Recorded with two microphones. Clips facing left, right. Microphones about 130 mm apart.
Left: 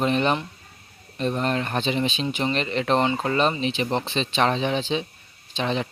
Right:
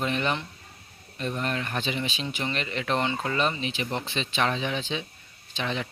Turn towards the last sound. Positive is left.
turn(degrees=25)  # may be behind; listen again after turning